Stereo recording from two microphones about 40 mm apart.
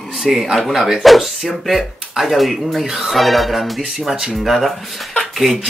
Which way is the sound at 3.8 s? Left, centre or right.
Centre.